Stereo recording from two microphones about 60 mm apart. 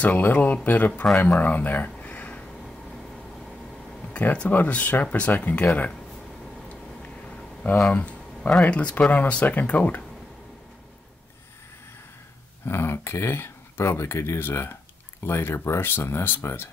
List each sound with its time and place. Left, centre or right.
0.0 s speech: left
4.1 s speech: left
7.0 s a sound: left
7.9 s speech: left
12.6 s speech: left